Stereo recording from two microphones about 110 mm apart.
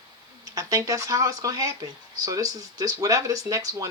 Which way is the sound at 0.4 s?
30° right (ahead or behind).